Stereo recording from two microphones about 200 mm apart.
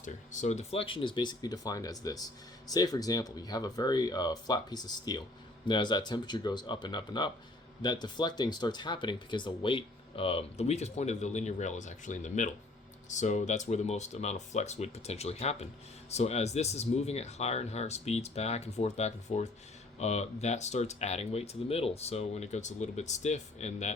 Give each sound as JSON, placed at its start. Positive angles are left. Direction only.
{"t": 0.0, "sound": "speech", "side_deg": 40}